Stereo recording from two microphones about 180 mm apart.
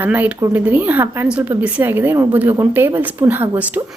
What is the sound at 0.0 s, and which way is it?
Speech, 10° right (ahead or behind).